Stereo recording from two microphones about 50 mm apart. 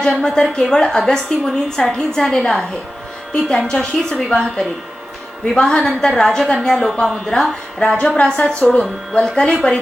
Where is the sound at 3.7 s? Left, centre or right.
Centre.